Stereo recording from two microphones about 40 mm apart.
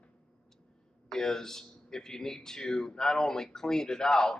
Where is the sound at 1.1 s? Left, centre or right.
Centre.